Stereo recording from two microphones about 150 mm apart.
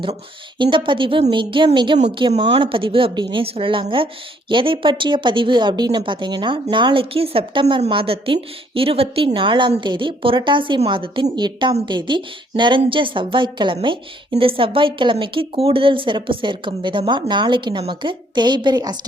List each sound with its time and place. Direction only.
0.6 s a woman's voice: 35° right (ahead or behind)